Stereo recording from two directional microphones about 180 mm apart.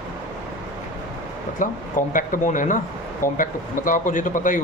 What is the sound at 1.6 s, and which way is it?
A man's voice, 45° left (ahead or behind).